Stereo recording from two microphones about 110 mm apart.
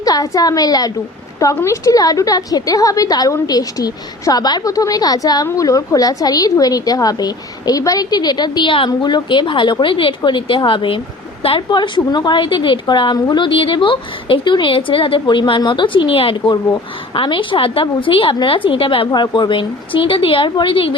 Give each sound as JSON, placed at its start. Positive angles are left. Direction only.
{"t": 0.0, "sound": "a woman's voice", "side_deg": 35}